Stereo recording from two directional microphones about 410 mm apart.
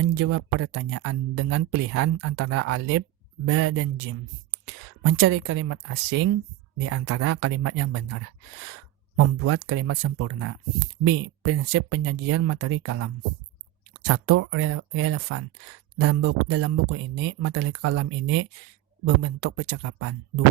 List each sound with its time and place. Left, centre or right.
0.0 s speech: right